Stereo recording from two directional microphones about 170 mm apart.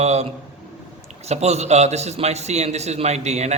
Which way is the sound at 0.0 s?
40° right (ahead or behind).